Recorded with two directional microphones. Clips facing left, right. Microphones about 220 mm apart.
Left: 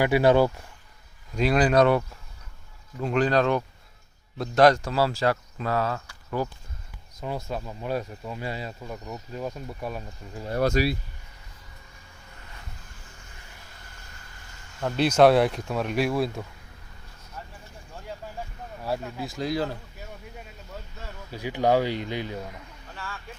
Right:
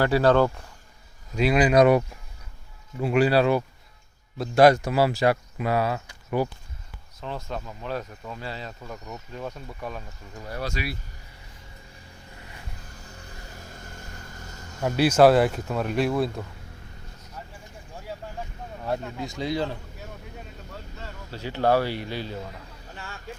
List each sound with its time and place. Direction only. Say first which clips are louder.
0.0 s speech: even; 15° left (ahead or behind)
1.4 s speech: right 2 dB; 10° right (ahead or behind)
7.2 s speech: left 2 dB; 10° left (ahead or behind)
10.8 s speech: left 9 dB; 45° left (ahead or behind)
13.1 s music: right 6 dB; 40° right (ahead or behind)
14.3 s vehicle: right 8 dB; 40° right (ahead or behind)
14.8 s speech: right 1 dB; 5° right (ahead or behind)
18.9 s speech: right 1 dB; 5° left (ahead or behind)
23.0 s speech: left 2 dB; 25° right (ahead or behind)